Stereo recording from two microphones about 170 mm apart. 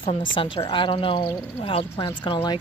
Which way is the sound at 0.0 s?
30° left (ahead or behind).